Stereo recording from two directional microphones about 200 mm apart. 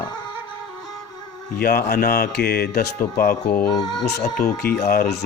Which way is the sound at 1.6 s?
50° left (ahead or behind).